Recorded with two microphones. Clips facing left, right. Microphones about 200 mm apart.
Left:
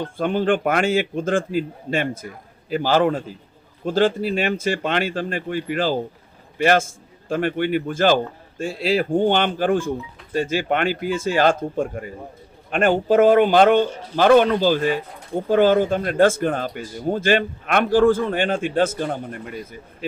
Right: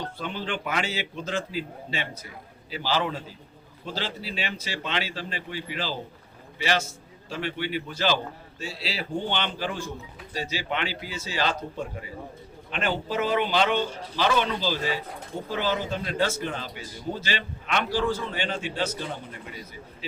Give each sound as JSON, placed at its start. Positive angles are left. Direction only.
{"t": 0.0, "sound": "speech", "side_deg": 50}